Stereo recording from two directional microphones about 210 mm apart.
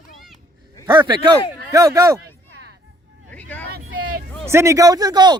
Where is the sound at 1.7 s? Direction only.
15° right (ahead or behind).